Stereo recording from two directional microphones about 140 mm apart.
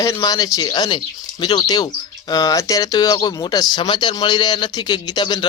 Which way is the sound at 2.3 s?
25° left (ahead or behind).